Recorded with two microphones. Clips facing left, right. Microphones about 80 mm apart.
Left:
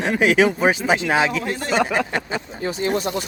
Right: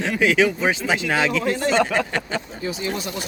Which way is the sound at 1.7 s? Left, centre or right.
Centre.